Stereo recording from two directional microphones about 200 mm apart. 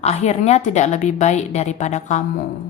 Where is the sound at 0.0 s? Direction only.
30° left (ahead or behind).